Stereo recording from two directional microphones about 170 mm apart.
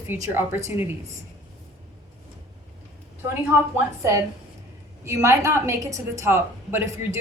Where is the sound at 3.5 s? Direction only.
15° right (ahead or behind).